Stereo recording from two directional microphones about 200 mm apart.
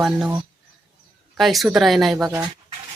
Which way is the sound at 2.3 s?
15° right (ahead or behind).